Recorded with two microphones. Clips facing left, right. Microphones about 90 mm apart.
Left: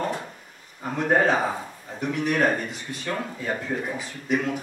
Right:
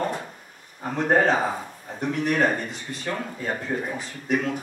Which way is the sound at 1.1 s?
5° left (ahead or behind).